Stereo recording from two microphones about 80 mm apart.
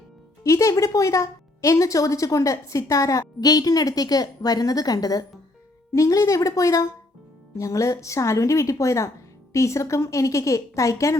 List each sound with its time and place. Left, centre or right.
0.4 s a woman's voice: left